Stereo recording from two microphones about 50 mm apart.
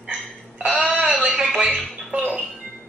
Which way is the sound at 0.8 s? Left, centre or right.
Centre.